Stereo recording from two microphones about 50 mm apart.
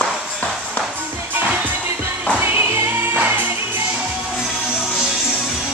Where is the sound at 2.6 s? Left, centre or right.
Right.